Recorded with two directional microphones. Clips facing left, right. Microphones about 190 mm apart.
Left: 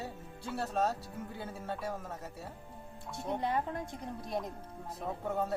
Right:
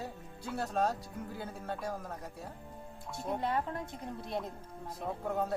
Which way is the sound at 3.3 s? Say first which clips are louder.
Even; 20° left (ahead or behind).